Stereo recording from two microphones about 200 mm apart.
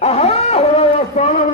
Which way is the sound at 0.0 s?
30° left (ahead or behind).